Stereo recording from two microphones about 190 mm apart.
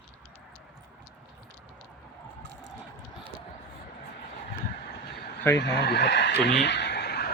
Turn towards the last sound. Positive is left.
turn(degrees=60)  # may be behind; listen again after turning